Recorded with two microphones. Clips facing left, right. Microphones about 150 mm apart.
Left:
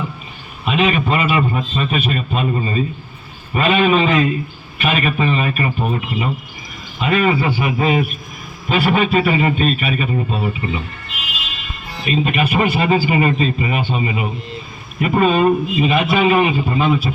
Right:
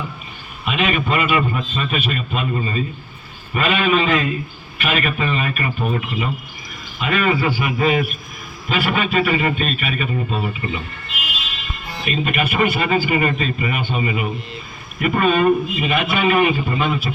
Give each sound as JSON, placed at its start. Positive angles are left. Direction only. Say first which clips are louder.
{"t": 0.6, "sound": "a man's voice", "louder": "left 4 dB", "side_deg": 35}
{"t": 12.2, "sound": "a man's voice", "louder": "left 1 dB", "side_deg": 35}